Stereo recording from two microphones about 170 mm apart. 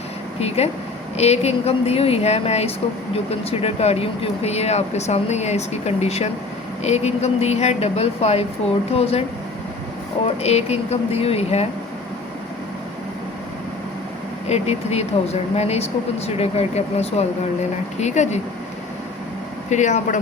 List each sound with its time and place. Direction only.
0.3 s speech: 35° left (ahead or behind)
10.2 s speech: 40° left (ahead or behind)
14.4 s speech: 40° left (ahead or behind)
19.7 s speech: 45° left (ahead or behind)